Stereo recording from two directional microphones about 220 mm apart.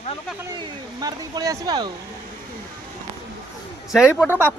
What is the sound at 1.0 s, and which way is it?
Speech, 15° right (ahead or behind).